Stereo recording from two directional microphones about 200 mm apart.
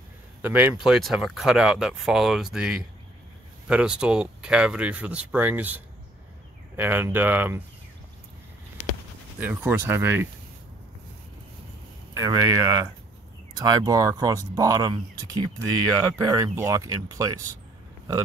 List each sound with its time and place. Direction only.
0.4 s speech: 10° right (ahead or behind)
6.8 s speech: 10° right (ahead or behind)
9.4 s speech: 10° right (ahead or behind)
12.2 s speech: 15° right (ahead or behind)